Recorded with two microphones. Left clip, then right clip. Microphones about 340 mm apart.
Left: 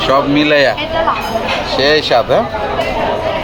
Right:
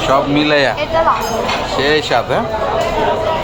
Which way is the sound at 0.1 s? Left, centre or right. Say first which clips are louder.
Left 1 dB; centre.